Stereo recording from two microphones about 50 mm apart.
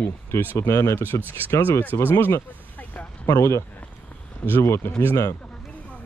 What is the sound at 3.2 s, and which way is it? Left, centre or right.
Speech, left.